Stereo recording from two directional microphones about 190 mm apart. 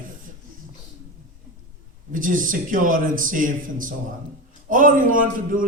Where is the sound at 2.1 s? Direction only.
45° right (ahead or behind).